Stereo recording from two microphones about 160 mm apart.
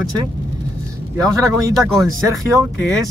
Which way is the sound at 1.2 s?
20° right (ahead or behind).